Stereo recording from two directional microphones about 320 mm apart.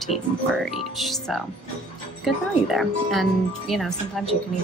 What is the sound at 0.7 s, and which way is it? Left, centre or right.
Speech, centre.